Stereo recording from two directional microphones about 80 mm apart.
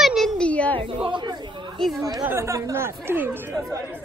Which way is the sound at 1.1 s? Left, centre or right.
Right.